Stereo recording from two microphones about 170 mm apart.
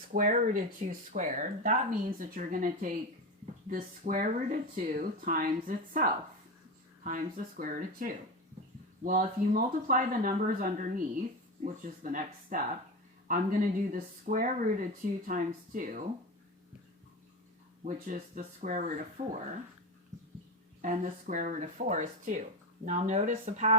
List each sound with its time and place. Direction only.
0.1 s speech: 55° right (ahead or behind)
17.8 s speech: 55° right (ahead or behind); by 19.3 s 40° right (ahead or behind)
20.8 s speech: 50° right (ahead or behind)